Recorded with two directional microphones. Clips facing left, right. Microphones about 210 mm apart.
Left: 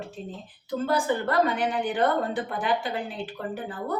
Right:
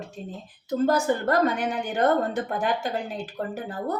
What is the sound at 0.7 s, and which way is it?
A woman's voice, 40° right (ahead or behind).